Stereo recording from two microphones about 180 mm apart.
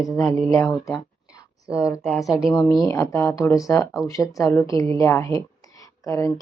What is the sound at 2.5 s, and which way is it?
Speech, 20° left (ahead or behind).